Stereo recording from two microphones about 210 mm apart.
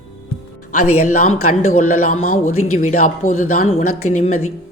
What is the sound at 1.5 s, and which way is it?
Speech, 30° left (ahead or behind).